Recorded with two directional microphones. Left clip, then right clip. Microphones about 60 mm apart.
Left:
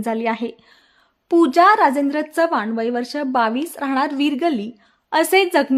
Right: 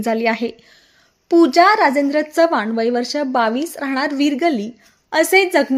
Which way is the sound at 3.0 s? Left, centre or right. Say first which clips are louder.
Right 2 dB; right.